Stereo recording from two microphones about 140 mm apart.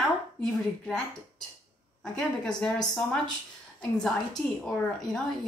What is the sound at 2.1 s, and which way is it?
A woman's voice, 5° left (ahead or behind).